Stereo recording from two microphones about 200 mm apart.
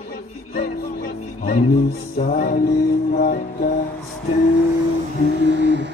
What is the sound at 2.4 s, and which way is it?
Music, 50° left (ahead or behind).